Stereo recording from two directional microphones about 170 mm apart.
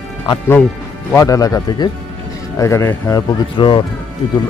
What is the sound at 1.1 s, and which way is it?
Speech, 20° left (ahead or behind).